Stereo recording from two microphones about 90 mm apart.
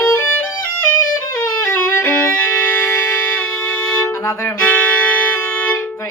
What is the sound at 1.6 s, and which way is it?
Violin, 25° left (ahead or behind).